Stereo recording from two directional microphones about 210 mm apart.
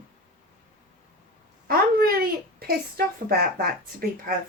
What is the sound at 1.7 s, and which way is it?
A woman's voice, 45° right (ahead or behind).